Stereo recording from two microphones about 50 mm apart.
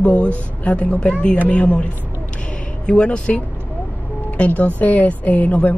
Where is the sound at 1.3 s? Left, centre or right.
Left.